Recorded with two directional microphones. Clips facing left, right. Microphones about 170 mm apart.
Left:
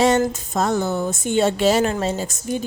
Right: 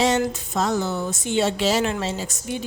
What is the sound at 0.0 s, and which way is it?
Speech, 50° left (ahead or behind).